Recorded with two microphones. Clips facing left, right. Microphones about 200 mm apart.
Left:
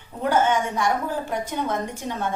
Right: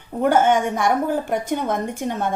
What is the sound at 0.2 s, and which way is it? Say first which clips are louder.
A woman's voice: right 4 dB; 55° right (ahead or behind).